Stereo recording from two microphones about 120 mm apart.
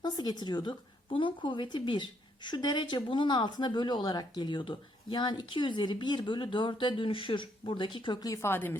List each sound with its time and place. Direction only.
0.0 s a woman's voice: 35° left (ahead or behind); by 8.7 s 20° left (ahead or behind)